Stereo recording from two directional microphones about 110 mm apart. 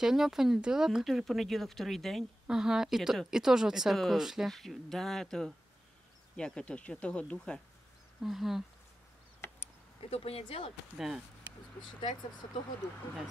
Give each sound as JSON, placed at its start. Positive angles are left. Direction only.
{"t": 0.0, "sound": "speech", "side_deg": -5}
{"t": 10.0, "sound": "speech", "side_deg": 65}
{"t": 11.0, "sound": "speech", "side_deg": -5}